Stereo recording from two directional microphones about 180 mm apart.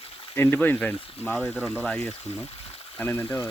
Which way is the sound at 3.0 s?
10° left (ahead or behind).